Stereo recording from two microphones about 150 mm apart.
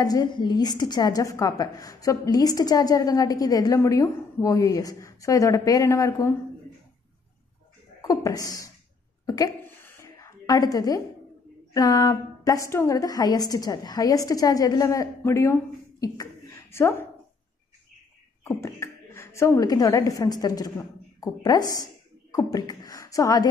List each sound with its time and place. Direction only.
0.0 s a woman's voice: 25° left (ahead or behind)
8.0 s speech: 25° left (ahead or behind)
9.2 s a sound: 20° left (ahead or behind)
11.7 s a woman's voice: 25° left (ahead or behind)
18.6 s speech: 15° left (ahead or behind)